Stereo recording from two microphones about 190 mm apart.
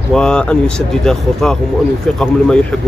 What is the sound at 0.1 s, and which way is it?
Speech, 5° left (ahead or behind).